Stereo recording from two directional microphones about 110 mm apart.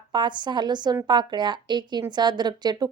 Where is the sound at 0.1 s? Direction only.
45° right (ahead or behind).